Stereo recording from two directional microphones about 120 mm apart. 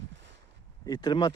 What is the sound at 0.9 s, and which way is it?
Speech, 40° left (ahead or behind).